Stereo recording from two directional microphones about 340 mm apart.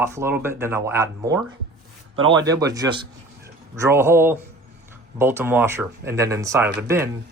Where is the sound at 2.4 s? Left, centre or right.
Centre.